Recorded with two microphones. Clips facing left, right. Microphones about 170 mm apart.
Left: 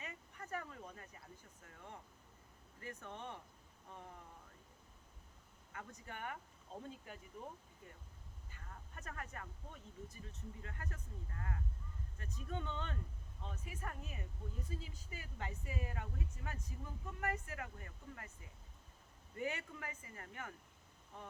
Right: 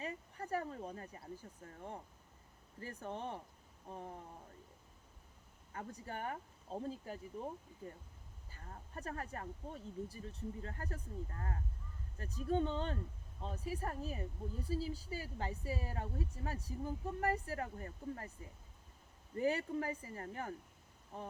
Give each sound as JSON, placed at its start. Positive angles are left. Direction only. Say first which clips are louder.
{"t": 0.0, "sound": "speech", "louder": "right 8 dB", "side_deg": -35}
{"t": 5.7, "sound": "speech", "louder": "right 6 dB", "side_deg": -35}
{"t": 19.4, "sound": "speech", "louder": "right 8 dB", "side_deg": -35}